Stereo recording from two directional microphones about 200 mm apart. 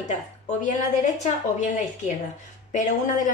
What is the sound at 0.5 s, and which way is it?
A woman's voice, 35° left (ahead or behind).